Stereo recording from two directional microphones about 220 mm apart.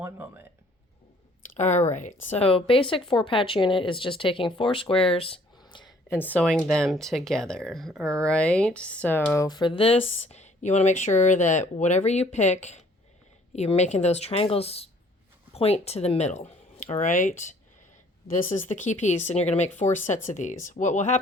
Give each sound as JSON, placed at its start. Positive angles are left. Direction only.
{"t": 0.0, "sound": "speech", "side_deg": -10}
{"t": 1.5, "sound": "a woman's voice", "side_deg": 30}
{"t": 6.1, "sound": "a woman's voice", "side_deg": 5}